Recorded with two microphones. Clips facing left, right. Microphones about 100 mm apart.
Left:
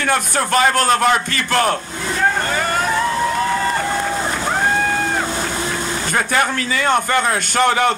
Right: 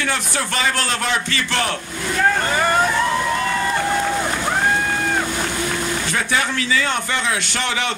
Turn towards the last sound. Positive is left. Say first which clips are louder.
# left 8 dB
turn(degrees=45)  # may be behind; listen again after turning